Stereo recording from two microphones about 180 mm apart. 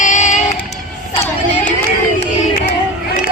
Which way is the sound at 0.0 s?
40° left (ahead or behind).